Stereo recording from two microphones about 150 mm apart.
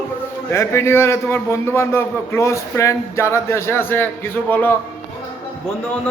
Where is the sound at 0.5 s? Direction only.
15° left (ahead or behind).